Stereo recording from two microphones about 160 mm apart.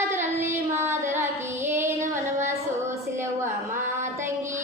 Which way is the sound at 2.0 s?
50° right (ahead or behind).